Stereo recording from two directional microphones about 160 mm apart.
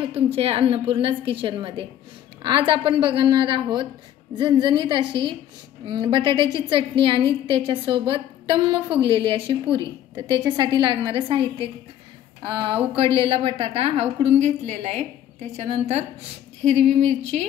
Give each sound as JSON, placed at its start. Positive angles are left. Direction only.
{"t": 0.0, "sound": "a woman's voice", "side_deg": -35}